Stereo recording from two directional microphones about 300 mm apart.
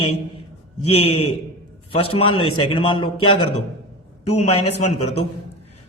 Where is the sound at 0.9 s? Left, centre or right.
Centre.